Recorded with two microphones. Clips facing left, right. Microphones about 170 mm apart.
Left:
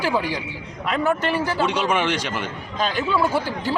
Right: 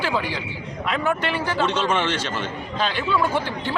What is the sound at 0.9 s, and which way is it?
Speech, 40° left (ahead or behind).